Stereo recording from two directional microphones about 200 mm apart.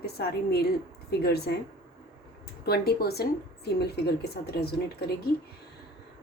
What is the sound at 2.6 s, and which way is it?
Speech, 50° left (ahead or behind).